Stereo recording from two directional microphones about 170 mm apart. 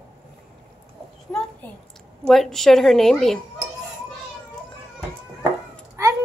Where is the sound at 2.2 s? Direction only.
Centre (ahead or behind).